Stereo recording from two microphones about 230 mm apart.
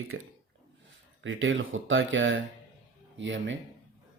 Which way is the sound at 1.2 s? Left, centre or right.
Right.